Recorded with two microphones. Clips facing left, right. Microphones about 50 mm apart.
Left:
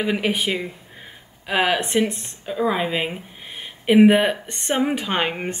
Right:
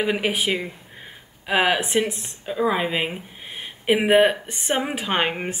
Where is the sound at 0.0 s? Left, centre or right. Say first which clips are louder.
Even; centre.